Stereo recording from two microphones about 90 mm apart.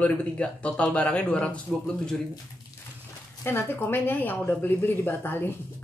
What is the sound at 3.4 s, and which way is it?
Speech, 25° left (ahead or behind).